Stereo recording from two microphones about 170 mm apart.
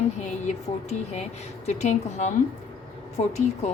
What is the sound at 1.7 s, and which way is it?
A woman's voice, 45° left (ahead or behind).